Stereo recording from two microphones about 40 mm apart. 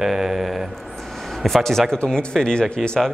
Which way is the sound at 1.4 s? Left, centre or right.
Centre.